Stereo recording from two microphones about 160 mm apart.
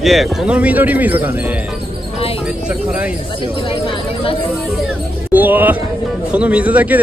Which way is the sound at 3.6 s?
35° left (ahead or behind).